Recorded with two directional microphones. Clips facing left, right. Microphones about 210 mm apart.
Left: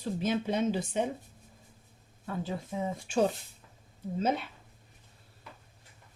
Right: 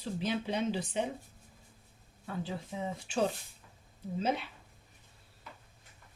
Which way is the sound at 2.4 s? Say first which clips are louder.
Left 4 dB; 45° left (ahead or behind).